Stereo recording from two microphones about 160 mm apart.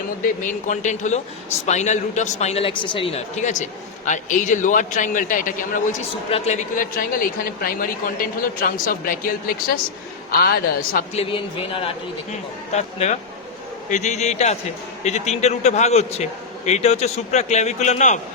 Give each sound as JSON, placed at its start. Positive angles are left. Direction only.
{"t": 0.7, "sound": "a man's voice", "side_deg": 50}
{"t": 3.3, "sound": "a man's voice", "side_deg": 50}
{"t": 6.3, "sound": "a man's voice", "side_deg": 45}
{"t": 11.1, "sound": "speech", "side_deg": 35}
{"t": 12.7, "sound": "a man's voice", "side_deg": 45}